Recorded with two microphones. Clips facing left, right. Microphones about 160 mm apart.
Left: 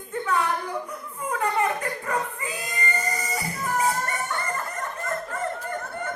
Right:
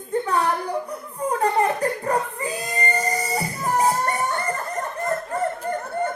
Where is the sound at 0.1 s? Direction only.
35° right (ahead or behind).